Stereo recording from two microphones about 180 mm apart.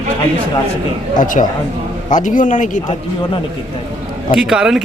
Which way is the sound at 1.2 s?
45° left (ahead or behind).